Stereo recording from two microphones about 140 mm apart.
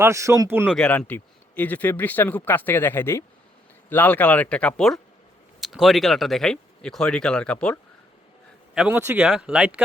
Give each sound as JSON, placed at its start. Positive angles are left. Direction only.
{"t": 0.0, "sound": "speech", "side_deg": -20}
{"t": 0.8, "sound": "speech", "side_deg": 10}
{"t": 8.7, "sound": "speech", "side_deg": -10}